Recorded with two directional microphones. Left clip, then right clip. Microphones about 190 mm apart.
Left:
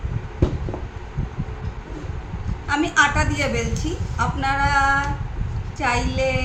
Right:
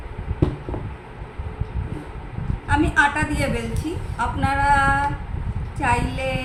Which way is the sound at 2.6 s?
10° left (ahead or behind).